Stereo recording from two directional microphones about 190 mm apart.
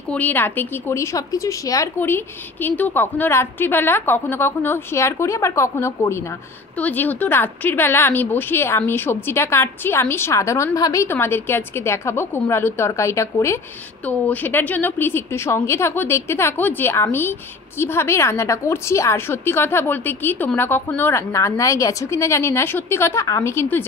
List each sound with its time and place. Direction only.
0.1 s a woman's voice: 10° left (ahead or behind)